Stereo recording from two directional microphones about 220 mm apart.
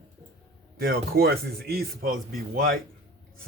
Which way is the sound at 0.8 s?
40° right (ahead or behind).